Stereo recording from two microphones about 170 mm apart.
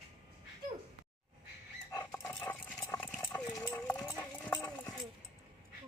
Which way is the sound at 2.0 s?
15° left (ahead or behind).